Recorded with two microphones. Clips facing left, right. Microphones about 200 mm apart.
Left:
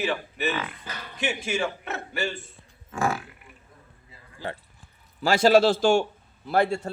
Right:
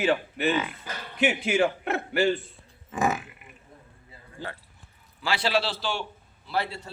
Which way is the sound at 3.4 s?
20° right (ahead or behind).